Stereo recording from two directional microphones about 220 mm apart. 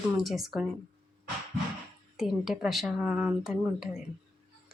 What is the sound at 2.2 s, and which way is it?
A woman's voice, centre (ahead or behind).